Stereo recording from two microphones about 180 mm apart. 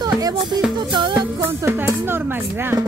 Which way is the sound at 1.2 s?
10° right (ahead or behind).